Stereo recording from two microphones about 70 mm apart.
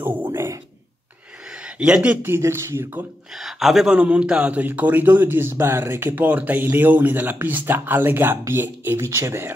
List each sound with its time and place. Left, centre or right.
0.0 s a sound: right
1.5 s a sound: centre
2.2 s speech: right
3.3 s a man's voice: centre
3.9 s speech: centre; by 6.1 s right
6.1 s speech: right